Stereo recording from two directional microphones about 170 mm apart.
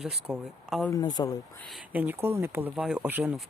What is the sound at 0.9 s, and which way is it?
Speech, 25° left (ahead or behind).